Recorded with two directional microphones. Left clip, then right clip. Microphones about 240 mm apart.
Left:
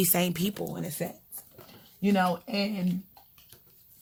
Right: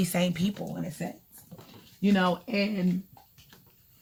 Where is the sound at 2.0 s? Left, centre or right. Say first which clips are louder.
Even; left.